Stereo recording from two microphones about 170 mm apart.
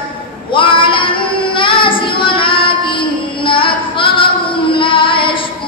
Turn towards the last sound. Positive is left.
turn(degrees=30)  # may be behind; listen again after turning